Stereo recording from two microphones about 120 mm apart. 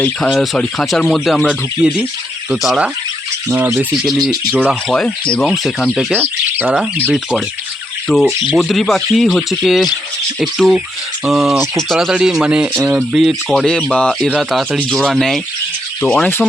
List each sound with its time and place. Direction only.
0.2 s speech: centre (ahead or behind)
3.5 s speech: 20° right (ahead or behind)
4.7 s speech: centre (ahead or behind)
6.1 s bird: 15° right (ahead or behind)
7.1 s speech: 5° right (ahead or behind)
13.1 s speech: centre (ahead or behind)